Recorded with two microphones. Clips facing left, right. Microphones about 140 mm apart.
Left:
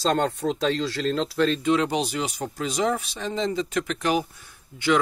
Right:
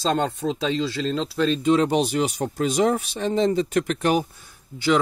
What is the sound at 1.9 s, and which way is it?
Speech, 50° right (ahead or behind).